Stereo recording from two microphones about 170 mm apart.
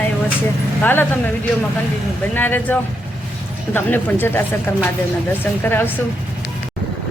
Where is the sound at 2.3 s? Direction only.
10° left (ahead or behind).